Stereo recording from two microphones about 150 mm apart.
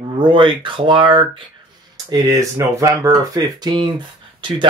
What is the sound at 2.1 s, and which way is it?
Speech, 20° right (ahead or behind).